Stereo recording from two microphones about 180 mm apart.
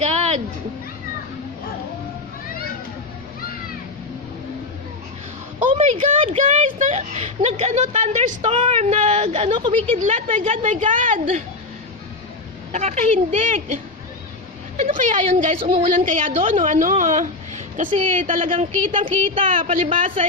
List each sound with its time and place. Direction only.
0.0 s music: 35° right (ahead or behind)
5.6 s a woman's voice: 45° right (ahead or behind)
9.9 s a woman's voice: 45° right (ahead or behind)
12.7 s a woman's voice: 40° right (ahead or behind)
14.8 s a woman's voice: 45° right (ahead or behind)
18.5 s speech: 30° right (ahead or behind)
19.5 s a woman's voice: 45° right (ahead or behind)